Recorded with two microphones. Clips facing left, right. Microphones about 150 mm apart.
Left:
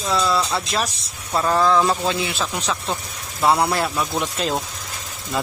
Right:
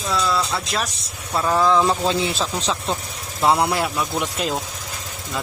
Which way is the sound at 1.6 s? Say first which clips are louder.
Right 1 dB; 15° right (ahead or behind).